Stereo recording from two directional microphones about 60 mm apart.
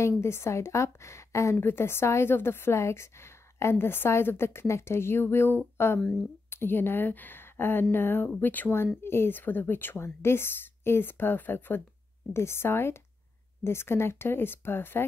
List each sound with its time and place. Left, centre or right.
0.2 s a woman's voice: left
1.6 s a woman's voice: left
3.7 s a woman's voice: left